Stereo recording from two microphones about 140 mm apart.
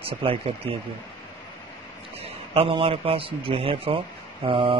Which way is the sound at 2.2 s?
40° right (ahead or behind).